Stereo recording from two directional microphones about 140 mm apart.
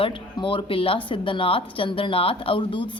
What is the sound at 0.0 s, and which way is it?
A woman's voice, 35° left (ahead or behind).